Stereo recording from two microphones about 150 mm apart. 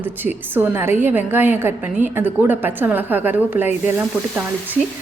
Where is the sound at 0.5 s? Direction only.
15° right (ahead or behind).